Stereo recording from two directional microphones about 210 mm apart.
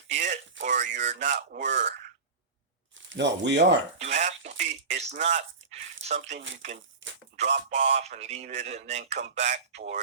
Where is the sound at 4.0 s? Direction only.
35° right (ahead or behind).